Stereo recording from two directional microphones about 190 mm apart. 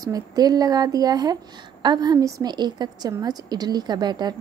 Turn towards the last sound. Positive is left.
turn(degrees=-20)  # may be behind; listen again after turning